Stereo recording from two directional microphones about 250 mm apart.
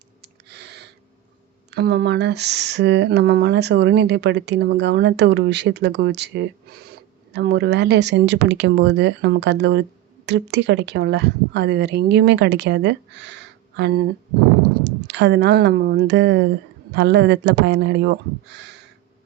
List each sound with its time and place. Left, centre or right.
0.2 s a sound: right
1.7 s speech: right
15.0 s speech: right